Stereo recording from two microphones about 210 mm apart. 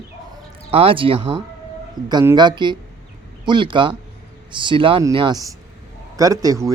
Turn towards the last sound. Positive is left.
turn(degrees=-15)  # may be behind; listen again after turning